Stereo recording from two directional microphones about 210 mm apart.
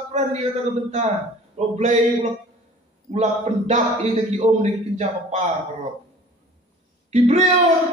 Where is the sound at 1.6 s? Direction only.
35° right (ahead or behind).